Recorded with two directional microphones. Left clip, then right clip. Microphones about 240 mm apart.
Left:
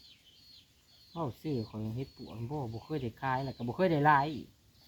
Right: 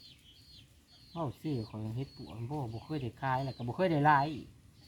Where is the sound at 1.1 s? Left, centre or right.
Centre.